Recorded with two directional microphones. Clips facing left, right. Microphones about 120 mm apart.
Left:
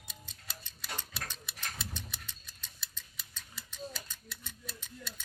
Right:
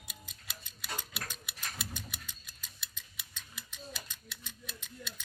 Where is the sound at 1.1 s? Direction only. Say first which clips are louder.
Even; 30° left (ahead or behind).